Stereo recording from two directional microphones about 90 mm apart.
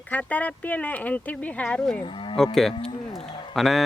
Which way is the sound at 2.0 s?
70° left (ahead or behind).